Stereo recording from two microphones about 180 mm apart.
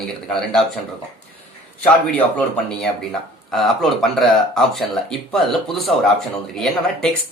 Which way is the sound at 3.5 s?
Centre (ahead or behind).